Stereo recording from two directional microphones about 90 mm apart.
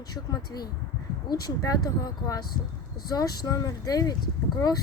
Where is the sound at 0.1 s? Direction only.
50° left (ahead or behind).